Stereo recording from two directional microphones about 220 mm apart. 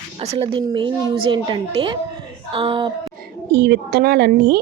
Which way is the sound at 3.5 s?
50° right (ahead or behind).